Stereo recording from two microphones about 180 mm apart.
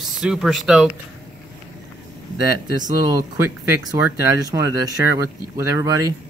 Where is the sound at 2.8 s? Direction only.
20° right (ahead or behind).